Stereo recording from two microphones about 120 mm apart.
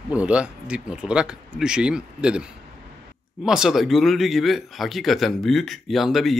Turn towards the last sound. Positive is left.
turn(degrees=0)  # may be behind; listen again after turning